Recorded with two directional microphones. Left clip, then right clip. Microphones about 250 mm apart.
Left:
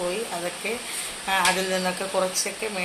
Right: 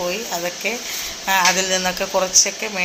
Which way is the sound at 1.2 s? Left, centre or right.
Centre.